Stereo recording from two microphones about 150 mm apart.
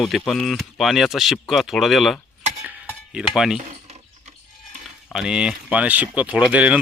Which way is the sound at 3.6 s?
50° right (ahead or behind).